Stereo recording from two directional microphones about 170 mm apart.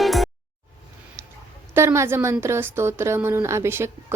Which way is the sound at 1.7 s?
15° right (ahead or behind).